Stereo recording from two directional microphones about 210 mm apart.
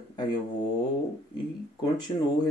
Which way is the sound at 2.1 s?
20° left (ahead or behind).